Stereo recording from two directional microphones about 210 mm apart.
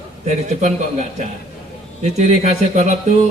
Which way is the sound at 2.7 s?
35° right (ahead or behind).